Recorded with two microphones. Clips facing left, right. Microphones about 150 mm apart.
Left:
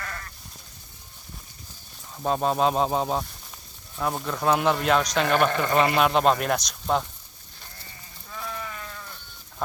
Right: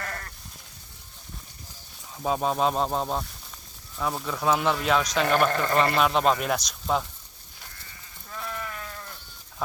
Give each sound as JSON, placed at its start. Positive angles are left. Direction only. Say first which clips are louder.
{"t": 0.0, "sound": "sheep", "louder": "right 1 dB", "side_deg": -45}
{"t": 2.1, "sound": "a man's voice", "louder": "left 2 dB", "side_deg": 0}